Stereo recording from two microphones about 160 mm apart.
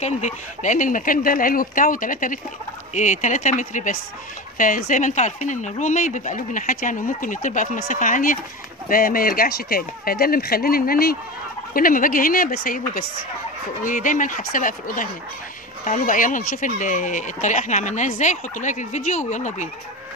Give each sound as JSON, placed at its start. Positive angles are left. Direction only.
{"t": 0.0, "sound": "speech", "side_deg": 50}
{"t": 11.7, "sound": "speech", "side_deg": 60}